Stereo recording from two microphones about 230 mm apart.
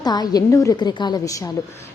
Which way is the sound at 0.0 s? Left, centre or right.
Centre.